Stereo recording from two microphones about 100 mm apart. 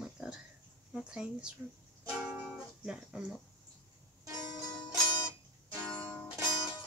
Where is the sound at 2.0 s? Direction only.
10° right (ahead or behind).